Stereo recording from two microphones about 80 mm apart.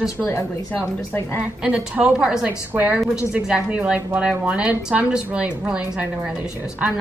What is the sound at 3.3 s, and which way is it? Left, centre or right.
A woman's voice, centre.